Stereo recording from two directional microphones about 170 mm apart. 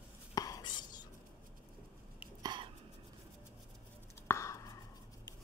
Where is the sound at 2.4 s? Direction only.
25° right (ahead or behind).